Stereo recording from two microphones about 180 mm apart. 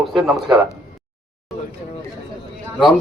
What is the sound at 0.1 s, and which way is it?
Speech, centre (ahead or behind).